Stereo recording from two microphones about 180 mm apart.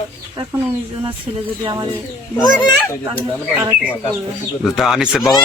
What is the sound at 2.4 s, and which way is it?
Speech, 20° left (ahead or behind).